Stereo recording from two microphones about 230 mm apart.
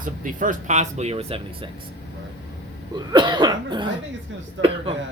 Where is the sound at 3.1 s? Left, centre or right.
Centre.